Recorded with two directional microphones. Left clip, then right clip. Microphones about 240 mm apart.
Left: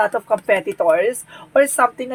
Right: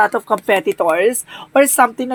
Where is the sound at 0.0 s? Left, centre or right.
Right.